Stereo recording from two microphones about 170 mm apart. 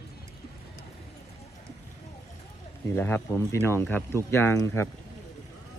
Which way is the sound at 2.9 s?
10° left (ahead or behind).